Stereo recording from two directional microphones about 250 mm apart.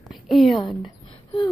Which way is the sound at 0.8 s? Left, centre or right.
Centre.